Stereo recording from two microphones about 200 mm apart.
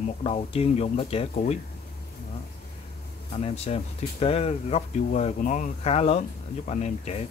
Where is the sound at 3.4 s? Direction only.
30° left (ahead or behind).